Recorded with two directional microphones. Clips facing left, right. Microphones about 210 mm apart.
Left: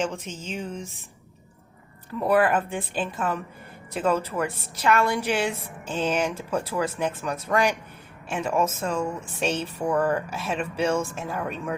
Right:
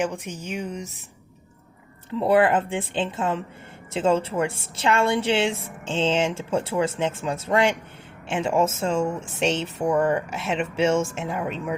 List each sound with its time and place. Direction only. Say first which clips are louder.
0.0 s speech: right 2 dB; 15° right (ahead or behind)
2.0 s a woman's voice: right 2 dB; 25° right (ahead or behind)